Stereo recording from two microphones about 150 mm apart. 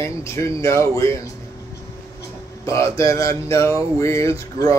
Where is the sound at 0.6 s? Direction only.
20° left (ahead or behind).